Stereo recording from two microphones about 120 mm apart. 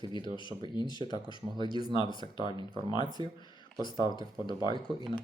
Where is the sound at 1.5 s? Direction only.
35° right (ahead or behind).